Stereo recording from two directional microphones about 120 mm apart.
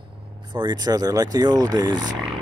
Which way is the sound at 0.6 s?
35° right (ahead or behind).